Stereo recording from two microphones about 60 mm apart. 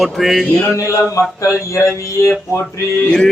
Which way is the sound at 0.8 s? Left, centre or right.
Left.